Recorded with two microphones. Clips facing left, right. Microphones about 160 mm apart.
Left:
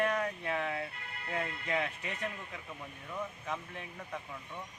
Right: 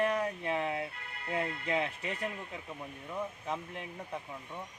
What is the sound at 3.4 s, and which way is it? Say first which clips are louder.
Speech: right 2 dB; 30° right (ahead or behind).